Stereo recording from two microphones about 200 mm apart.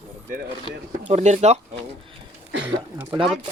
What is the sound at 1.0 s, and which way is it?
Speech, 35° right (ahead or behind).